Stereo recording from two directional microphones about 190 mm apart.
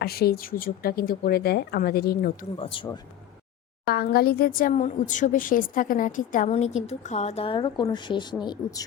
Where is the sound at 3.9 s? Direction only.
55° left (ahead or behind).